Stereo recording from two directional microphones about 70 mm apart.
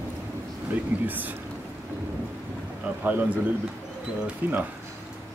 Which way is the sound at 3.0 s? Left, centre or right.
Right.